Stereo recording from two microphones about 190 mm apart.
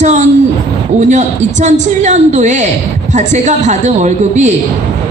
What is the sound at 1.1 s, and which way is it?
A woman's voice, 40° right (ahead or behind).